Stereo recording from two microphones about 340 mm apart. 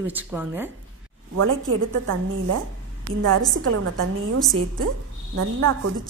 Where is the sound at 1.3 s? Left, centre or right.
Right.